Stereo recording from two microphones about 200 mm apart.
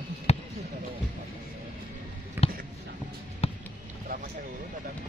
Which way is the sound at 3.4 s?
30° left (ahead or behind).